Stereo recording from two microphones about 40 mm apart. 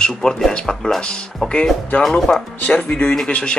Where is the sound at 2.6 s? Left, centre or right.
Left.